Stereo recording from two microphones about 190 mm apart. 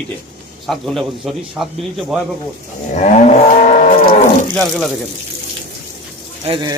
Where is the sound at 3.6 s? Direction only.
40° left (ahead or behind).